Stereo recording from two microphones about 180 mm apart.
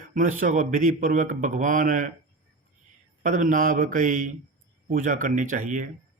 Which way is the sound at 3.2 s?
45° right (ahead or behind).